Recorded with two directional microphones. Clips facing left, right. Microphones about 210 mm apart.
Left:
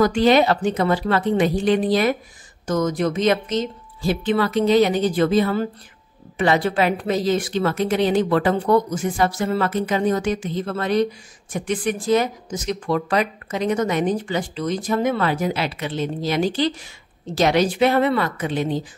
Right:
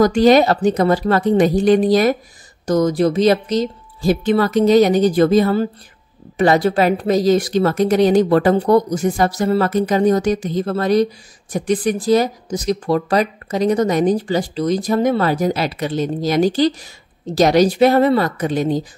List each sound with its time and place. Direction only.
0.0 s speech: 40° right (ahead or behind)